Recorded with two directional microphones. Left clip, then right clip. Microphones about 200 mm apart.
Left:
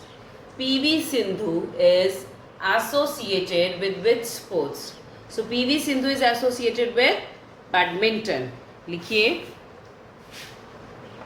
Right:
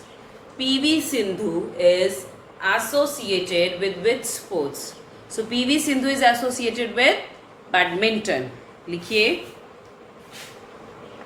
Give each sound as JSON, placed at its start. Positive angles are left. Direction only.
{"t": 0.6, "sound": "a woman's voice", "side_deg": -5}
{"t": 8.9, "sound": "speech", "side_deg": 10}